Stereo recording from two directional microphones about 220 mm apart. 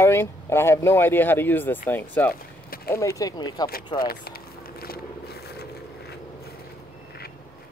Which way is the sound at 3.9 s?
40° left (ahead or behind).